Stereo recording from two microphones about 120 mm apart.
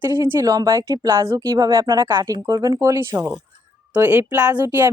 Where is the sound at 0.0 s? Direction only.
20° right (ahead or behind).